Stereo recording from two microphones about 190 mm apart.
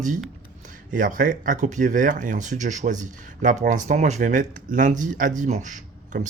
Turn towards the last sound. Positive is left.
turn(degrees=-40)  # may be behind; listen again after turning